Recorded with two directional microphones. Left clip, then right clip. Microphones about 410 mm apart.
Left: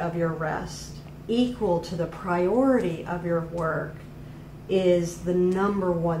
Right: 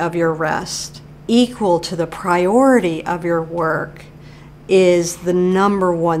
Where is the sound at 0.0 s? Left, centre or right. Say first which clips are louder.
Right 10 dB; right.